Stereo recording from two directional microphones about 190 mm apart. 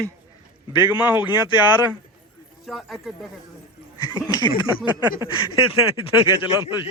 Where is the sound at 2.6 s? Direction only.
Centre (ahead or behind).